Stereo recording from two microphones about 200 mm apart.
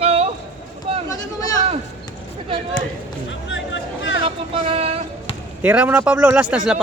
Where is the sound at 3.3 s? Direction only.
70° left (ahead or behind).